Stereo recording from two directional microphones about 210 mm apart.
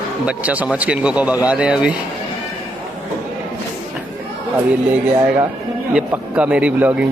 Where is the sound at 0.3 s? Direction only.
5° right (ahead or behind).